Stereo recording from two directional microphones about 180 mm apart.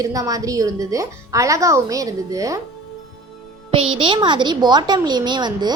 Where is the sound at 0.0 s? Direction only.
20° right (ahead or behind).